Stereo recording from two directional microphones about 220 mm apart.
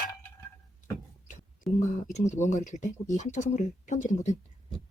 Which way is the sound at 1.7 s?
Centre (ahead or behind).